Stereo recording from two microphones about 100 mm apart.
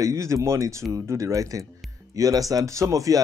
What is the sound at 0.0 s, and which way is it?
Speech, 30° right (ahead or behind).